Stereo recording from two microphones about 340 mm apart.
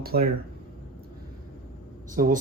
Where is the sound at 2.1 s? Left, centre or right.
Right.